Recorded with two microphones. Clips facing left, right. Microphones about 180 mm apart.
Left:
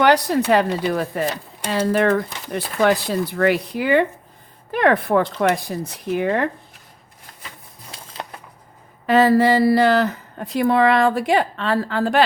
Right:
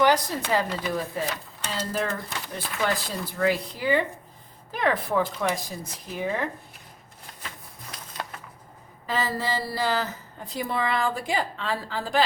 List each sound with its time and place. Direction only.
0.0 s speech: 70° left (ahead or behind)
3.0 s speech: 70° left (ahead or behind)
7.9 s a sound: 30° left (ahead or behind)
9.0 s speech: 70° left (ahead or behind)